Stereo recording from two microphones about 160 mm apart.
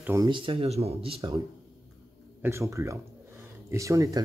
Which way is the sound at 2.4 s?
15° right (ahead or behind).